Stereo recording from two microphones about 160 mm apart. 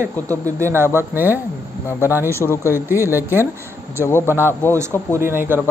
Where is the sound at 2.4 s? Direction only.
15° left (ahead or behind).